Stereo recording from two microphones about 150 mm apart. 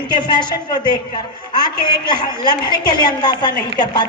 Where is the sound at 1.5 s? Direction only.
30° left (ahead or behind).